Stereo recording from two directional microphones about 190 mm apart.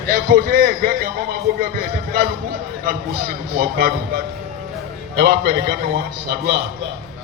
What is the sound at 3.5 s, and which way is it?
A man's voice, 50° right (ahead or behind).